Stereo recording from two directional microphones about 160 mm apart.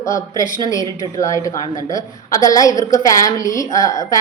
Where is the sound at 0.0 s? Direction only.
20° left (ahead or behind).